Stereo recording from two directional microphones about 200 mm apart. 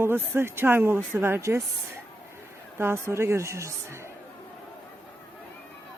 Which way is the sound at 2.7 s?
10° right (ahead or behind).